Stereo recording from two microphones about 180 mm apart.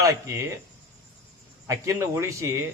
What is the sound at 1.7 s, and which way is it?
Speech, 15° right (ahead or behind).